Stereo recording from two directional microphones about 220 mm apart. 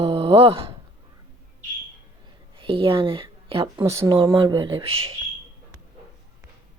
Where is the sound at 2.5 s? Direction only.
25° right (ahead or behind).